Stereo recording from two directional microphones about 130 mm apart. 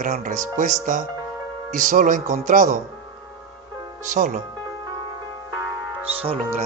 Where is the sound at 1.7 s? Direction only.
85° right.